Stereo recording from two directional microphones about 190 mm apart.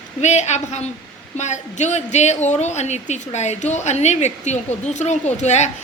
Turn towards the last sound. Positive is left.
turn(degrees=35)  # may be behind; listen again after turning